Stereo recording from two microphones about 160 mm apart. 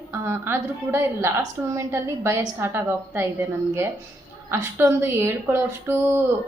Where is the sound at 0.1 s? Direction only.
15° right (ahead or behind).